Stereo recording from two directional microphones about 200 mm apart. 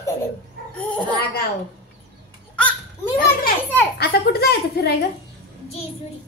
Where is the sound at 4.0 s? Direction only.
55° left (ahead or behind).